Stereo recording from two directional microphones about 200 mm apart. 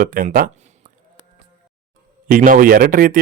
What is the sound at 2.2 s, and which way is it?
Speech, 45° right (ahead or behind).